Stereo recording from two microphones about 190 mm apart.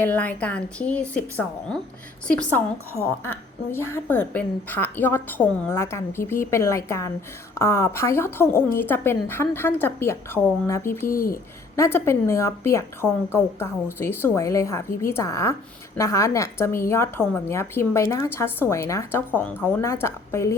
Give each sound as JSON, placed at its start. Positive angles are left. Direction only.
{"t": 0.0, "sound": "a woman's voice", "side_deg": 10}
{"t": 3.7, "sound": "a woman's voice", "side_deg": 10}